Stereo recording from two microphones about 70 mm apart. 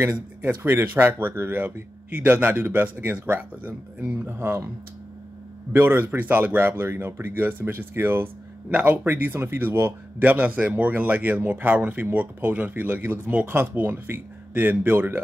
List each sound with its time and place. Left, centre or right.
0.0 s a man's voice: right
5.7 s speech: right
10.1 s a man's voice: right